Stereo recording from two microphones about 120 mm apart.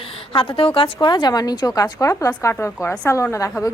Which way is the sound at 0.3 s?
50° left (ahead or behind).